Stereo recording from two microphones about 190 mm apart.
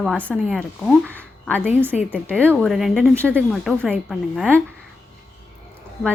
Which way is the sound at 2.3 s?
5° left (ahead or behind).